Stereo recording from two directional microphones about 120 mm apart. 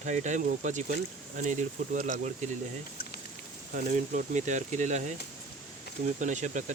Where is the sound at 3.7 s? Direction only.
90° right.